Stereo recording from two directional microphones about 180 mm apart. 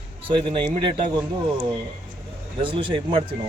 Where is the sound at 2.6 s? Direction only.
30° right (ahead or behind).